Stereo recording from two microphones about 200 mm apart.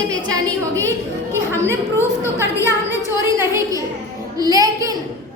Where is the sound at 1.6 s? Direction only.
10° right (ahead or behind).